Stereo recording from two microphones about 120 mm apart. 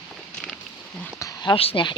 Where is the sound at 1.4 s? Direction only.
45° left (ahead or behind).